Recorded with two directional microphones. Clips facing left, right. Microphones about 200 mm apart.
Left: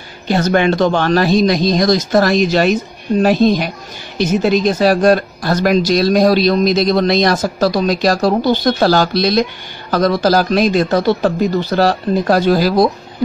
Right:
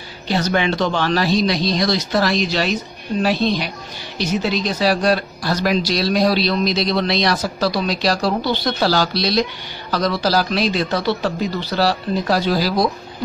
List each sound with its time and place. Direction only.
0.3 s speech: 50° left (ahead or behind)